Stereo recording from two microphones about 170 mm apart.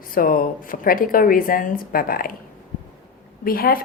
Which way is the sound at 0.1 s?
55° left (ahead or behind).